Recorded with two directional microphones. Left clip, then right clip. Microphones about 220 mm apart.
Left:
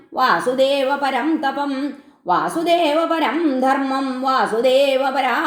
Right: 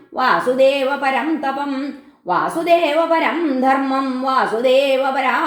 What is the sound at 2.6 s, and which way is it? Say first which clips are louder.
Speech: right 4 dB; 35° left (ahead or behind).